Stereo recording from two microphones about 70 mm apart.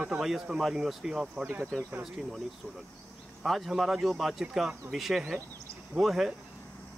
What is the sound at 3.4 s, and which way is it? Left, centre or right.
Speech, centre.